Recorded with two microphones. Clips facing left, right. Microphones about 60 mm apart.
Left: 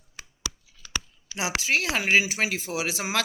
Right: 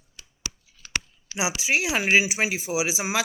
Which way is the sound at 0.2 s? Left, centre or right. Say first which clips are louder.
Left 5 dB; left.